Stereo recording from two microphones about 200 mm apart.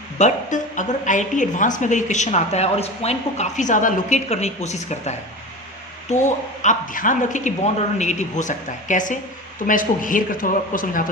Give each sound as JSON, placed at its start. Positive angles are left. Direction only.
{"t": 0.2, "sound": "a woman's voice", "side_deg": 40}